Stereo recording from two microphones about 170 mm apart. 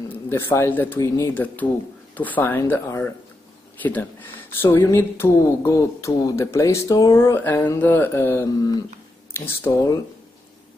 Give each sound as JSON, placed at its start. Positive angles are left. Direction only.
{"t": 0.1, "sound": "speech", "side_deg": 15}